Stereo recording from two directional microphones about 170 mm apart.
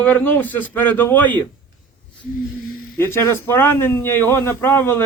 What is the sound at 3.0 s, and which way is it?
A man's voice, 15° left (ahead or behind).